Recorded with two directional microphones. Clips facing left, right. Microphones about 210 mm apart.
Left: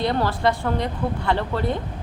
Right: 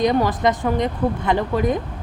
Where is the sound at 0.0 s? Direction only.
15° right (ahead or behind).